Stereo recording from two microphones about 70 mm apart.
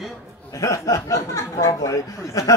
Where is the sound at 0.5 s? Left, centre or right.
Left.